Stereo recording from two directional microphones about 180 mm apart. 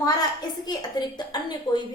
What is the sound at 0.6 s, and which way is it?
A woman's voice, 25° left (ahead or behind).